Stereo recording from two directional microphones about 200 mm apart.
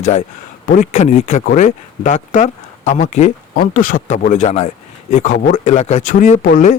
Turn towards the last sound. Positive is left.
turn(degrees=45)  # may be behind; listen again after turning